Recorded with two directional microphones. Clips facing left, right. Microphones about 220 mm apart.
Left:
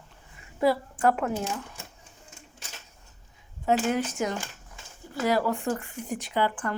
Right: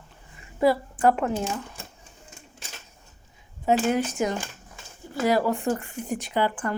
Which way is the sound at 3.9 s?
15° right (ahead or behind).